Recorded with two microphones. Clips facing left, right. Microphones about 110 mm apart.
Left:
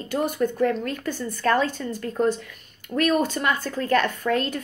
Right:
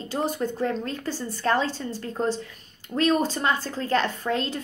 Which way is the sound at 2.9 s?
35° left (ahead or behind).